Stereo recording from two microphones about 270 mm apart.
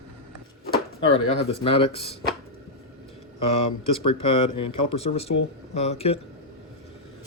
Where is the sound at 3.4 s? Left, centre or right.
Left.